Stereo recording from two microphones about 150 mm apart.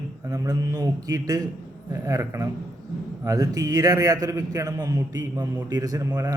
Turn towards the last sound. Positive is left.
turn(degrees=-20)  # may be behind; listen again after turning